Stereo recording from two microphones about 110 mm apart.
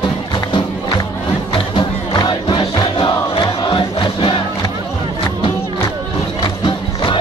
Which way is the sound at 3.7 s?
50° left (ahead or behind).